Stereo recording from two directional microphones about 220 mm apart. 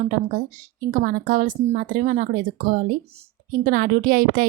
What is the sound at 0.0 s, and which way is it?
A woman's voice, 35° right (ahead or behind).